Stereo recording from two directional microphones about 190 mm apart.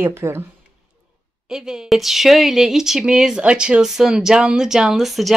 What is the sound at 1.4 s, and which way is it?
A woman's voice, 5° right (ahead or behind).